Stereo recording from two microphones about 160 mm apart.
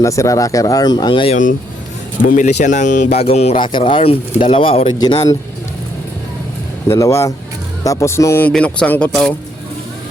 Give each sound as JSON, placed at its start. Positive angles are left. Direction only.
{"t": 0.0, "sound": "speech", "side_deg": 20}
{"t": 2.2, "sound": "speech", "side_deg": 55}
{"t": 4.9, "sound": "speech", "side_deg": 25}
{"t": 6.8, "sound": "speech", "side_deg": 15}